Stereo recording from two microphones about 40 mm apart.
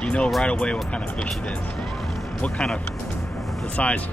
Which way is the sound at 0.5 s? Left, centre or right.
Left.